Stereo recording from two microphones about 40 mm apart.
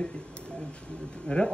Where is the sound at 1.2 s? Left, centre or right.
Left.